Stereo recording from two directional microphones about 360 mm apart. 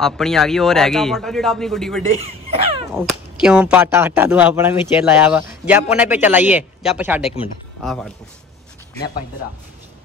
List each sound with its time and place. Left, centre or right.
0.0 s speech: centre
2.2 s speech: centre
2.9 s speech: centre